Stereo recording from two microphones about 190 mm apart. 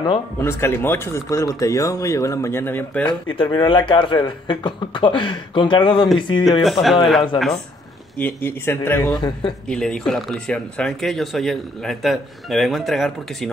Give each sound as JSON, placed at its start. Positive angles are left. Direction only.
{"t": 0.0, "sound": "speech", "side_deg": 20}
{"t": 3.1, "sound": "speech", "side_deg": 25}
{"t": 6.6, "sound": "speech", "side_deg": 0}
{"t": 8.2, "sound": "speech", "side_deg": 10}